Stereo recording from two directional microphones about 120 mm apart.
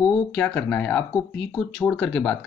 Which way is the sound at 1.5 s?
Centre (ahead or behind).